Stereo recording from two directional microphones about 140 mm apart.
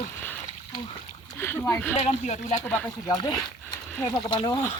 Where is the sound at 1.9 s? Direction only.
55° left (ahead or behind).